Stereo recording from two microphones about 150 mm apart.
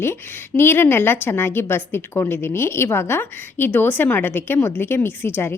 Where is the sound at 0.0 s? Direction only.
15° left (ahead or behind).